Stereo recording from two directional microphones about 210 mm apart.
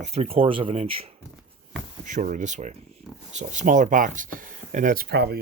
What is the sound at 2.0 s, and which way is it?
Speech, 35° right (ahead or behind).